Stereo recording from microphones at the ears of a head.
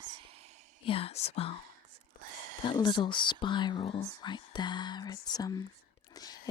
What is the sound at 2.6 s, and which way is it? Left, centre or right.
Speech, left.